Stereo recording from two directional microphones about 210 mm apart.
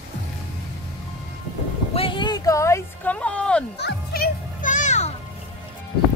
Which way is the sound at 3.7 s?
50° left (ahead or behind).